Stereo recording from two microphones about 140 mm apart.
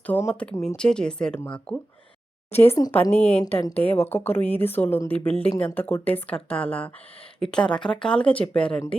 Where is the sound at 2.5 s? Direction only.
50° left (ahead or behind).